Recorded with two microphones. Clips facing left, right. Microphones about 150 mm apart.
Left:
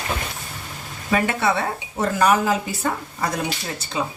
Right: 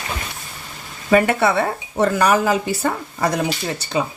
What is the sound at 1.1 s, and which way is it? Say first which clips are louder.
A woman's voice: right 5 dB; 60° right (ahead or behind).